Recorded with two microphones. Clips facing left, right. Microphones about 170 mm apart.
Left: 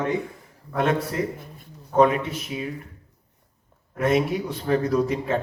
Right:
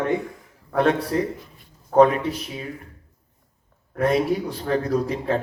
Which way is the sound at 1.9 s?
35° right (ahead or behind).